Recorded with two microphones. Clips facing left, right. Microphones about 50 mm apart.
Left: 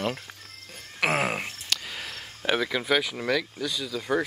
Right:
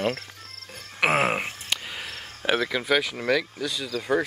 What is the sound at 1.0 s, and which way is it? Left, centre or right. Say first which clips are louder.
Speech: right 3 dB; centre.